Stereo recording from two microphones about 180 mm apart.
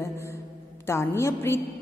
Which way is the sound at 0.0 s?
15° left (ahead or behind).